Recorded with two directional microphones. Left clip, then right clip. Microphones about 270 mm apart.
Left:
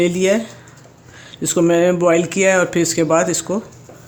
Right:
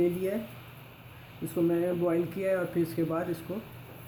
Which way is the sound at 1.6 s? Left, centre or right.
Left.